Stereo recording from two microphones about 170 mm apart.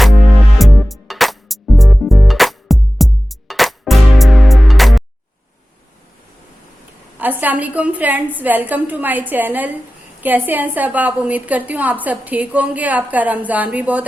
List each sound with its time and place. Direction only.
0.6 s music: centre (ahead or behind)
7.2 s a woman's voice: 10° right (ahead or behind)